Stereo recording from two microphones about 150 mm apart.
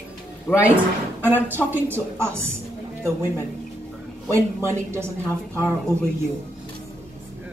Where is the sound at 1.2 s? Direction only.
15° right (ahead or behind).